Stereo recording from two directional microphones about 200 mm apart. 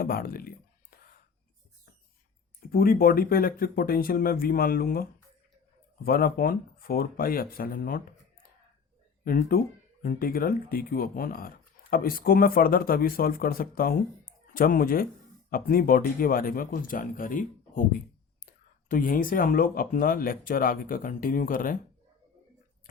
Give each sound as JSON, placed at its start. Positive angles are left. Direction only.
{"t": 0.0, "sound": "a sound", "side_deg": 50}
{"t": 2.6, "sound": "speech", "side_deg": 45}
{"t": 6.1, "sound": "speech", "side_deg": 45}